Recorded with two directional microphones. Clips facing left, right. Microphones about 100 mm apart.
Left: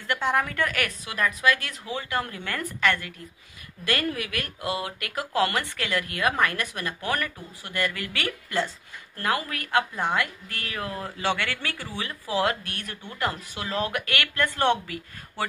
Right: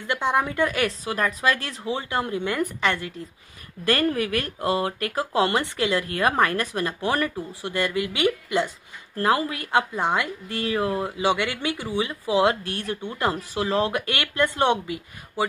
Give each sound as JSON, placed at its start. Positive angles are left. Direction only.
{"t": 0.0, "sound": "speech", "side_deg": -20}
{"t": 1.0, "sound": "speech", "side_deg": -35}
{"t": 3.8, "sound": "speech", "side_deg": -35}